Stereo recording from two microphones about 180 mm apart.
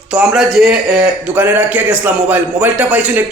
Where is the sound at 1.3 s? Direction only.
10° right (ahead or behind).